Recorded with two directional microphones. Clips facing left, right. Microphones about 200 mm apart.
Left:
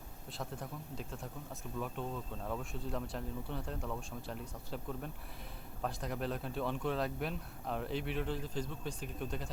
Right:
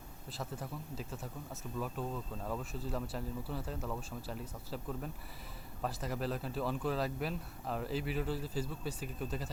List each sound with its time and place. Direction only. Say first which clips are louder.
0.3 s speech: right 1 dB; centre (ahead or behind)